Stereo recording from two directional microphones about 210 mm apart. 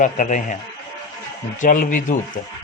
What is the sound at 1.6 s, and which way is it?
Speech, 40° left (ahead or behind).